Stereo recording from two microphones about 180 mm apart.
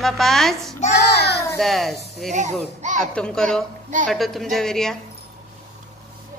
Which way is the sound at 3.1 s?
5° left (ahead or behind).